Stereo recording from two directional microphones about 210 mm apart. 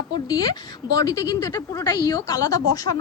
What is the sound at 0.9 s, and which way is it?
A woman's voice, 15° left (ahead or behind).